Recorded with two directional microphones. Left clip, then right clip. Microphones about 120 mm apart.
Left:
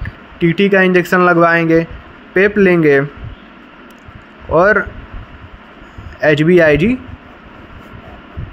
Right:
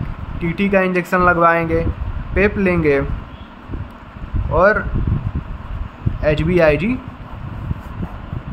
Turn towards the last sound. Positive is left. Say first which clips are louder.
# left 5 dB
turn(degrees=40)  # may be behind; listen again after turning